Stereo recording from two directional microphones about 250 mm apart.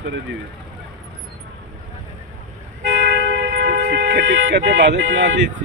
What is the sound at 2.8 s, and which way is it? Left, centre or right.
Speech, right.